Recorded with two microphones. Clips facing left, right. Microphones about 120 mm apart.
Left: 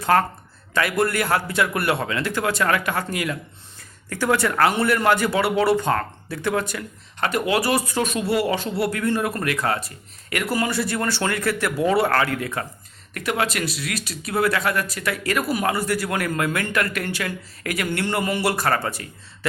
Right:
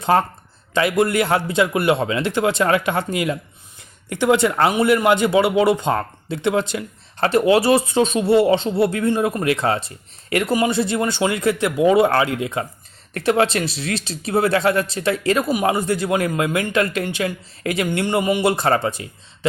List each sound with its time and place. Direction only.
0.0 s speech: 25° right (ahead or behind)